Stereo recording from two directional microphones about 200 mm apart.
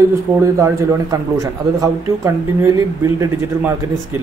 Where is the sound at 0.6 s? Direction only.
15° right (ahead or behind).